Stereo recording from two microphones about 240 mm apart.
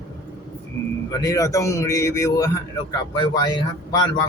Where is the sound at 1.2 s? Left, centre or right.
Centre.